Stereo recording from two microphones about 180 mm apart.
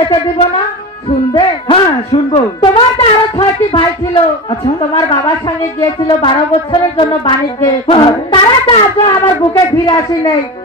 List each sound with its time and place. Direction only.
0.0 s a woman's voice: 35° left (ahead or behind)
1.0 s music: 30° left (ahead or behind)